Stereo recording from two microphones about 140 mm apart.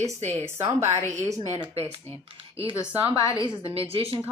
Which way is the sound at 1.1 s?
20° right (ahead or behind).